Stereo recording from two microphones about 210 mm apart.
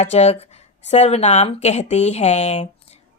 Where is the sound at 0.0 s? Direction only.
30° left (ahead or behind).